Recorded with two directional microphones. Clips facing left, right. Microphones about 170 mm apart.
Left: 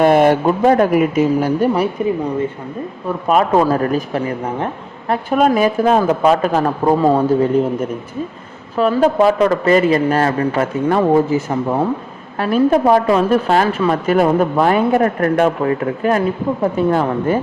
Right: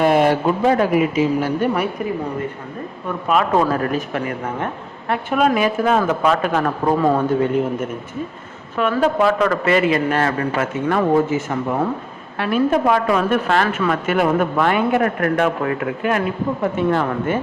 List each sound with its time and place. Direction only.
0.0 s speech: 50° left (ahead or behind); by 1.9 s 35° left (ahead or behind)
3.2 s a man's voice: 40° left (ahead or behind)